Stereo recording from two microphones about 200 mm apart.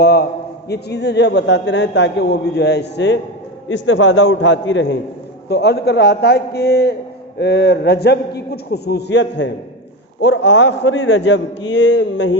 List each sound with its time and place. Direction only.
0.0 s a man's voice: 50° left (ahead or behind)
3.7 s a man's voice: 70° left (ahead or behind)